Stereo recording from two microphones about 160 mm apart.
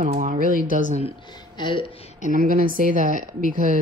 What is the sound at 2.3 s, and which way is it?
A woman's voice, 60° right (ahead or behind).